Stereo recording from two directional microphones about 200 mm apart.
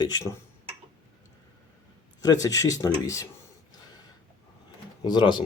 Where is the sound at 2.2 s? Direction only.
20° left (ahead or behind).